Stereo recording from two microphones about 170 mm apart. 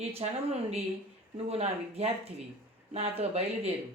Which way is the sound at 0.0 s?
35° right (ahead or behind).